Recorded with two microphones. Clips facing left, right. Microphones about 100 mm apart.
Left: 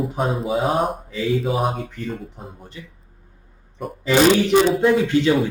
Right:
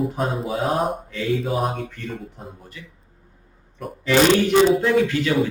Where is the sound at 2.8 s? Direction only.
25° left (ahead or behind).